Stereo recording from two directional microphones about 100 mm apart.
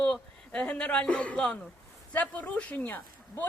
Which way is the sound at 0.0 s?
10° left (ahead or behind).